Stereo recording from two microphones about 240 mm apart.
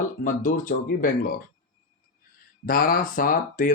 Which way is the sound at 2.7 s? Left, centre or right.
Left.